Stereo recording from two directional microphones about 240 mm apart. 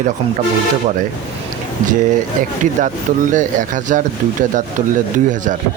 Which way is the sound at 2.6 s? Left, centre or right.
Right.